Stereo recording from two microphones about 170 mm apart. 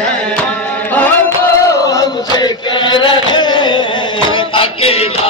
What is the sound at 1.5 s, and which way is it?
Chant, 20° left (ahead or behind).